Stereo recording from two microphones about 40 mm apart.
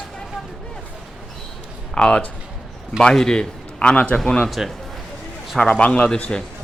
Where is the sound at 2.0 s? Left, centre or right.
Left.